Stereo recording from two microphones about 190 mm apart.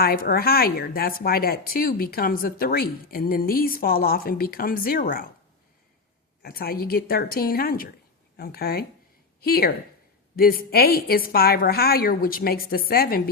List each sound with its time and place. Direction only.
0.0 s a woman's voice: 50° left (ahead or behind)
6.4 s a woman's voice: 55° left (ahead or behind)